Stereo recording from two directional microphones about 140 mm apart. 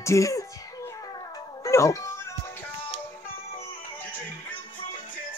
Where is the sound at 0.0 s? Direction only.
20° left (ahead or behind).